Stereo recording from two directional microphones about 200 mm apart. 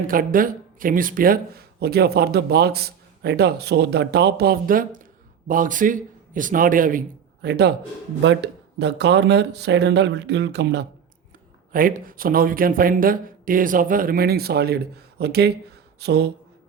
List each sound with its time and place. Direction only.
0.1 s speech: 45° right (ahead or behind)
7.4 s speech: 55° right (ahead or behind)
8.8 s speech: 60° right (ahead or behind)
11.7 s speech: 45° right (ahead or behind)